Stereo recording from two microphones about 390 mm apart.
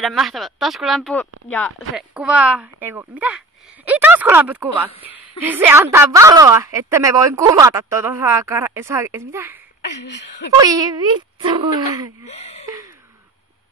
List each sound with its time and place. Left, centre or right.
0.0 s a woman's voice: centre
10.0 s speech: left
10.6 s a woman's voice: centre
12.3 s speech: centre